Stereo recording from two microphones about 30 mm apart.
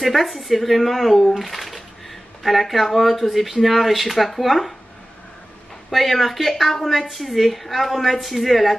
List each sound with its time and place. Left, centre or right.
0.0 s a woman's voice: centre
5.9 s a woman's voice: centre